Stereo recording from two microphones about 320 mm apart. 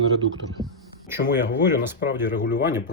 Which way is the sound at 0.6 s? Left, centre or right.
Centre.